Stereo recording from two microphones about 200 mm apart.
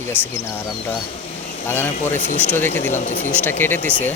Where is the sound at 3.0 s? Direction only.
35° left (ahead or behind).